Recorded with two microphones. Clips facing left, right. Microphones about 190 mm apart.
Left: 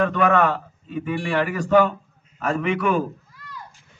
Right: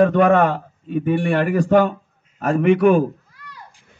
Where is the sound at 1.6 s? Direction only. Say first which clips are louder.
Even; 55° right (ahead or behind).